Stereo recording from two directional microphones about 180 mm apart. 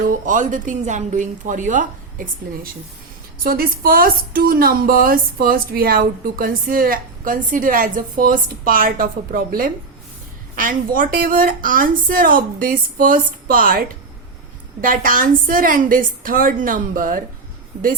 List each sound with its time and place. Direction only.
0.1 s a woman's voice: 45° right (ahead or behind)
3.4 s a woman's voice: 55° right (ahead or behind)